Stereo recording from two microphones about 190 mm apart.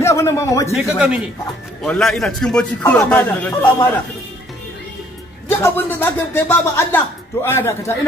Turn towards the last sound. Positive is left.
turn(degrees=10)  # may be behind; listen again after turning